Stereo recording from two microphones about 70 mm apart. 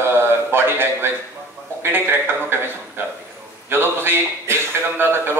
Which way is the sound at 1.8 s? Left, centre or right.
Right.